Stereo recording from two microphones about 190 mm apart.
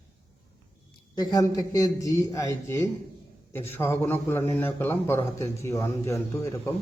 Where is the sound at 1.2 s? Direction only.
20° left (ahead or behind).